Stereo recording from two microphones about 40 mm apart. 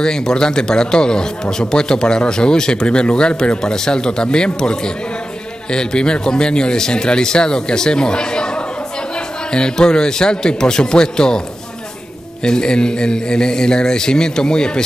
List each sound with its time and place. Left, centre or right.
0.0 s speech: centre
12.4 s speech: centre